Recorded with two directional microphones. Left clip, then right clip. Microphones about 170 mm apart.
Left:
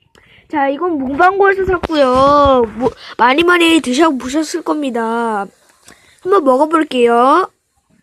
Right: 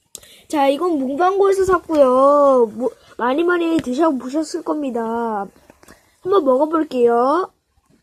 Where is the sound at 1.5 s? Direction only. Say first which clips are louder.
Left 2 dB; 10° left (ahead or behind).